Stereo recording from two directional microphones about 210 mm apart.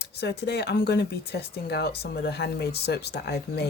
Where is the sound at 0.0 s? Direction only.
50° left (ahead or behind).